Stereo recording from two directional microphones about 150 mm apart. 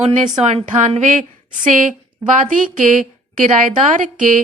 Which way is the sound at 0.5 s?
55° right (ahead or behind).